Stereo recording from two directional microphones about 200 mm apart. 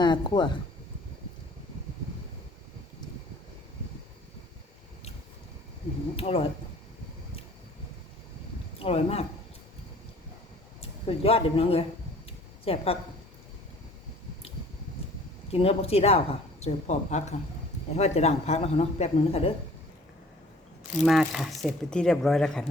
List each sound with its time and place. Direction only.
0.0 s speech: 20° left (ahead or behind)
6.1 s speech: 30° left (ahead or behind)
8.8 s speech: 30° left (ahead or behind)
10.8 s speech: 30° left (ahead or behind)
15.5 s speech: 30° left (ahead or behind)
21.0 s speech: centre (ahead or behind)